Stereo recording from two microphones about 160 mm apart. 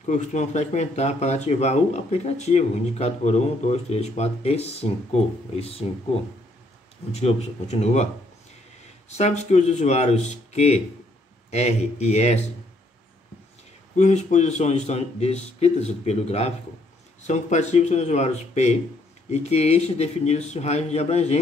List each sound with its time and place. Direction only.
0.0 s speech: 50° left (ahead or behind)
7.2 s speech: 40° left (ahead or behind)
9.1 s speech: 45° left (ahead or behind)
13.9 s speech: 45° left (ahead or behind)